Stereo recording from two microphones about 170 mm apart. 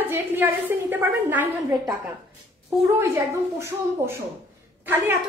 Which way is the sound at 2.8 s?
15° right (ahead or behind).